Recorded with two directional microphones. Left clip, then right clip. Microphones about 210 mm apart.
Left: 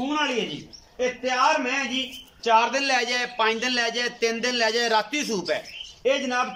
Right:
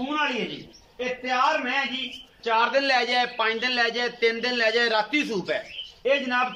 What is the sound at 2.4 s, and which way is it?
A man's voice, 5° left (ahead or behind).